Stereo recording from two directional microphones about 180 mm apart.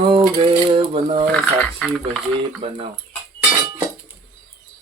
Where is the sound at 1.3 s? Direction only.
Centre (ahead or behind).